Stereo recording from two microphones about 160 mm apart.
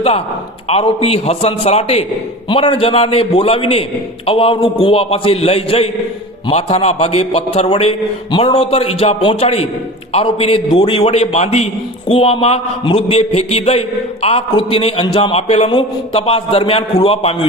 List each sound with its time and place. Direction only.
1.0 s a man's voice: 40° left (ahead or behind)